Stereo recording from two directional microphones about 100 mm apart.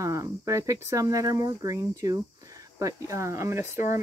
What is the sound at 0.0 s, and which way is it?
Speech, 35° right (ahead or behind).